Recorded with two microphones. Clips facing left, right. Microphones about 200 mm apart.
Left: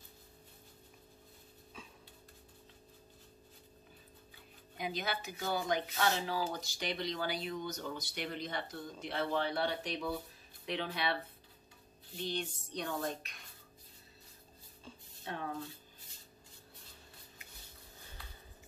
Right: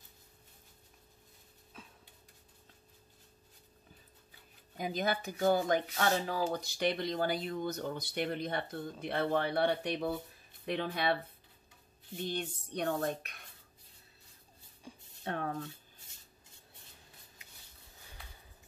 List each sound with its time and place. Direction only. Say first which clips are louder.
4.7 s speech: right 5 dB; 45° right (ahead or behind)
12.3 s a sound: right 1 dB; 55° right (ahead or behind)
14.9 s music: right 2 dB; 15° right (ahead or behind)
15.2 s speech: right 4 dB; 55° right (ahead or behind)